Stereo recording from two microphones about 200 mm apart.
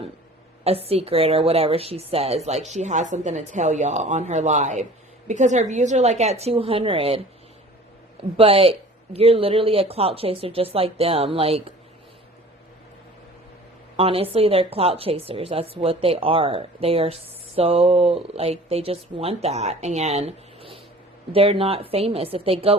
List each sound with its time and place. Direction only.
0.6 s a woman's voice: 30° right (ahead or behind)
8.4 s speech: 30° right (ahead or behind)
13.9 s speech: 30° right (ahead or behind)